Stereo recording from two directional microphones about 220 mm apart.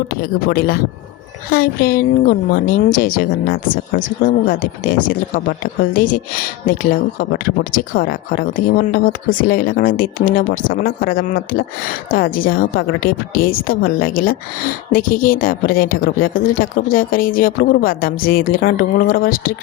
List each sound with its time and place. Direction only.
0.1 s a woman's voice: 40° left (ahead or behind)